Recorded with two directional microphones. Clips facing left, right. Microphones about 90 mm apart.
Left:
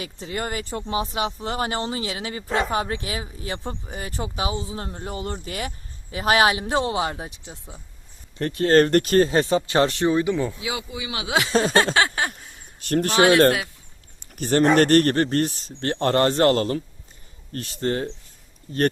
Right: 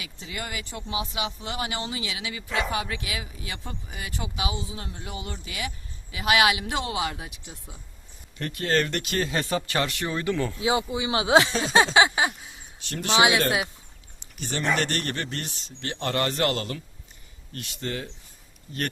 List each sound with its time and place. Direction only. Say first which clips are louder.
0.0 s speech: left 7 dB; 40° left (ahead or behind)
10.1 s speech: left 6 dB; 20° left (ahead or behind)
10.6 s speech: right 5 dB; 30° right (ahead or behind)
11.9 s a sound: right 2 dB; 10° right (ahead or behind)
12.8 s speech: left 4 dB; 45° left (ahead or behind)
14.3 s speech: left 9 dB; 45° left (ahead or behind)